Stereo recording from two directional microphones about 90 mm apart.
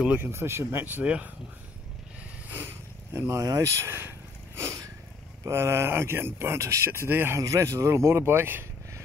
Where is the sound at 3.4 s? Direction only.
45° right (ahead or behind).